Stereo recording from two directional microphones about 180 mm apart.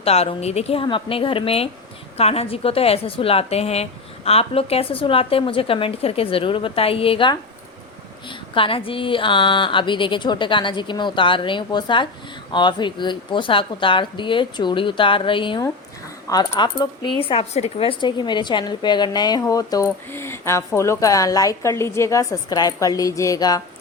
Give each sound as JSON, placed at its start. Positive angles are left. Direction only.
{"t": 0.0, "sound": "a woman's voice", "side_deg": 35}
{"t": 8.5, "sound": "a woman's voice", "side_deg": 30}